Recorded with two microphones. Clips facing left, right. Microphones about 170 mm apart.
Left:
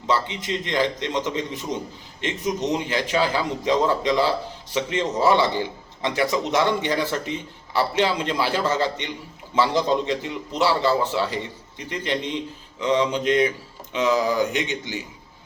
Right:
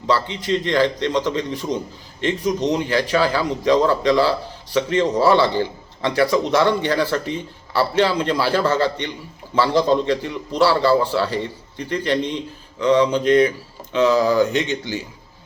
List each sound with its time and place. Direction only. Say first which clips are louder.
0.1 s a man's voice: right 4 dB; 20° left (ahead or behind)
2.7 s a man's voice: right 4 dB; 20° left (ahead or behind)